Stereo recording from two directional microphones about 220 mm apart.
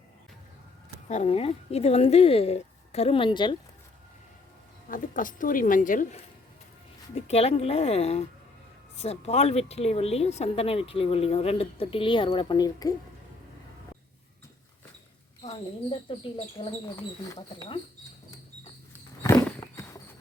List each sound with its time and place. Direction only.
1.0 s speech: 30° left (ahead or behind)
4.9 s speech: 35° left (ahead or behind)
7.3 s speech: 30° left (ahead or behind)
15.4 s speech: 20° left (ahead or behind)
19.2 s horse: 15° left (ahead or behind)